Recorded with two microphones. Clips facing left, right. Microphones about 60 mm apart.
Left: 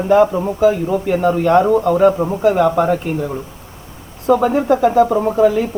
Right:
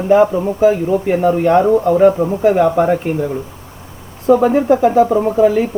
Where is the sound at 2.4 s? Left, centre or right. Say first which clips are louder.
Right 1 dB; centre.